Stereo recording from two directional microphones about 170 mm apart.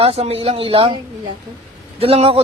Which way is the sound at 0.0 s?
35° right (ahead or behind).